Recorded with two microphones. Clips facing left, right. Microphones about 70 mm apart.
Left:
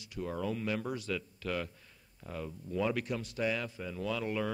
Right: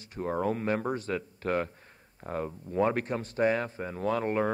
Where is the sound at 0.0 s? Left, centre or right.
Right.